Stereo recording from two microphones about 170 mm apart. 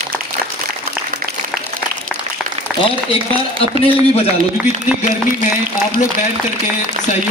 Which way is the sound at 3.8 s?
35° left (ahead or behind).